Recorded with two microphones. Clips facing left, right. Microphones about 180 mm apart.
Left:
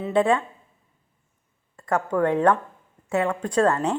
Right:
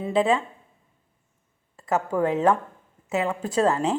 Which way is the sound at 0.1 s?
25° right (ahead or behind).